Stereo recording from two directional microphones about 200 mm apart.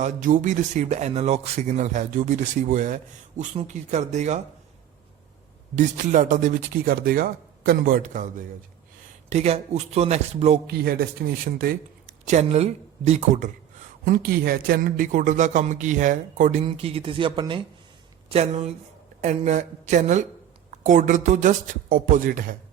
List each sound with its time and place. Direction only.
0.0 s speech: 40° right (ahead or behind)
5.7 s speech: 40° right (ahead or behind)
10.7 s speech: 50° right (ahead or behind)